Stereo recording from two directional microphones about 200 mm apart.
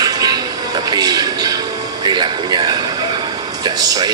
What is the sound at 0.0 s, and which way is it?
Music, 20° right (ahead or behind).